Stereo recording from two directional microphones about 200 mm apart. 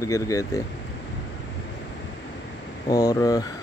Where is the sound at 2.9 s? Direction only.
20° left (ahead or behind).